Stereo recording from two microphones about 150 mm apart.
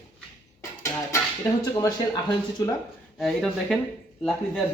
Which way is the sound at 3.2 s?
Centre (ahead or behind).